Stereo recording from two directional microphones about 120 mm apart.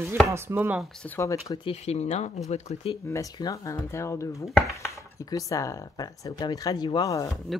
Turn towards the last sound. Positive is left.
turn(degrees=25)  # may be behind; listen again after turning